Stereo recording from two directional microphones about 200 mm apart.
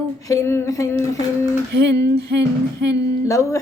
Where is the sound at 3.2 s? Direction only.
15° left (ahead or behind).